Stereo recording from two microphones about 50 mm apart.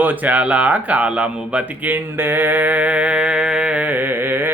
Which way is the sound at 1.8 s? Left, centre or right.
Right.